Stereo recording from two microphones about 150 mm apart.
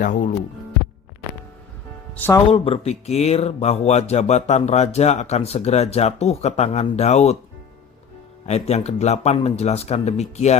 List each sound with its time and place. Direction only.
0.0 s speech: 55° left (ahead or behind)
2.1 s speech: 15° left (ahead or behind)
2.5 s speech: 40° left (ahead or behind)
8.4 s speech: 45° left (ahead or behind)